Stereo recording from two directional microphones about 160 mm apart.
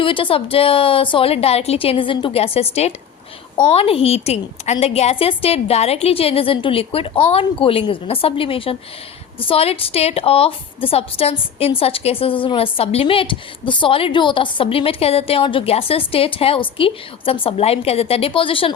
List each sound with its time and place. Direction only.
0.0 s a woman's voice: 35° left (ahead or behind)